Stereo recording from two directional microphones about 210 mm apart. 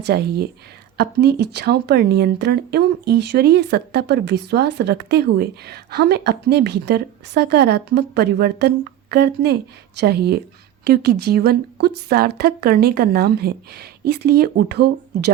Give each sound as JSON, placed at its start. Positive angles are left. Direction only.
{"t": 0.0, "sound": "speech", "side_deg": -50}